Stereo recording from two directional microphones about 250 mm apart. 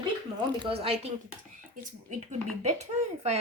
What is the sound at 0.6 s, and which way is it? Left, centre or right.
A child's voice, right.